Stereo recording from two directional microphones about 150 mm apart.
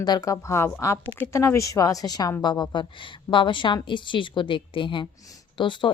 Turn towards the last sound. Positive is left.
turn(degrees=30)  # may be behind; listen again after turning